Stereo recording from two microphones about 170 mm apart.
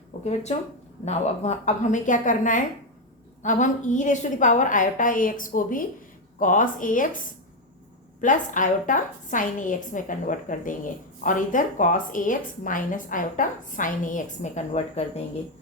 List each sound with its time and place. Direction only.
0.1 s a sound: 40° left (ahead or behind)
1.0 s a woman's voice: 40° left (ahead or behind)
8.2 s a woman's voice: 50° left (ahead or behind)